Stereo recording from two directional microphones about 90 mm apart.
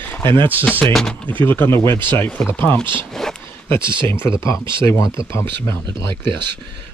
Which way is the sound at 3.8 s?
65° right (ahead or behind).